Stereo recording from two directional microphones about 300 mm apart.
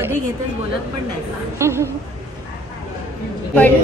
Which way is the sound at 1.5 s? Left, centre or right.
Centre.